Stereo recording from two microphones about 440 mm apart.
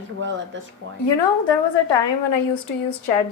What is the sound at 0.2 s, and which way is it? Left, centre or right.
Speech, right.